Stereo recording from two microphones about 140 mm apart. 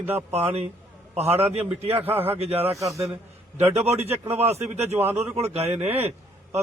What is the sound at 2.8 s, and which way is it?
Speech, 20° right (ahead or behind).